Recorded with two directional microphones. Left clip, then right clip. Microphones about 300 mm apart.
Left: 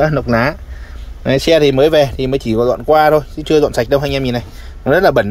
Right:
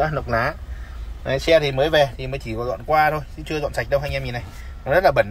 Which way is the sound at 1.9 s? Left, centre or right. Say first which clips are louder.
Left 6 dB; left.